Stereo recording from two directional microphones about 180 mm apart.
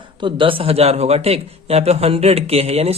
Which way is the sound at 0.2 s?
30° right (ahead or behind).